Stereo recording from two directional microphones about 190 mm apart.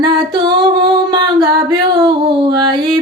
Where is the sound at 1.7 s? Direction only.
20° right (ahead or behind).